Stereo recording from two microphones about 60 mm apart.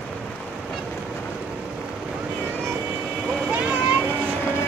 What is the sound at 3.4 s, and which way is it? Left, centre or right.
Vehicle, right.